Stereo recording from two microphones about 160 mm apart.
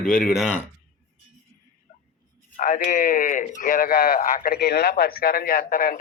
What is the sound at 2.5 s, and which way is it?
Speech, 55° left (ahead or behind).